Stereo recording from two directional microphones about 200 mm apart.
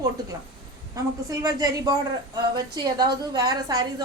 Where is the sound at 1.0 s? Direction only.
15° right (ahead or behind).